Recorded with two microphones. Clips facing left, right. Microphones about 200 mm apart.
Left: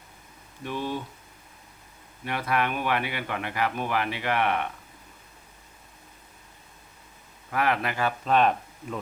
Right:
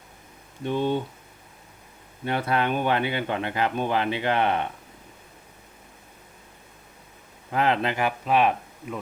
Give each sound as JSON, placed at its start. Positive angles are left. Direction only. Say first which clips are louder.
{"t": 0.6, "sound": "speech", "louder": "right 7 dB", "side_deg": -25}
{"t": 2.2, "sound": "speech", "louder": "right 3 dB", "side_deg": -30}
{"t": 7.5, "sound": "a man's voice", "louder": "right 3 dB", "side_deg": -25}